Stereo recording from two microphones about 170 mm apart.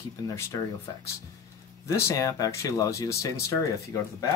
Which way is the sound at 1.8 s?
20° left (ahead or behind).